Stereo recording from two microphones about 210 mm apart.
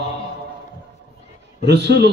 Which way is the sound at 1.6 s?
55° right (ahead or behind).